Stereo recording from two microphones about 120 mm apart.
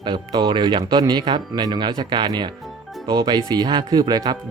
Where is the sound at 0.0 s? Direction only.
40° right (ahead or behind).